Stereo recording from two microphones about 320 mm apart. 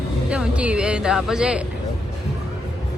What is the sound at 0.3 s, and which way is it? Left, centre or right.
Speech, centre.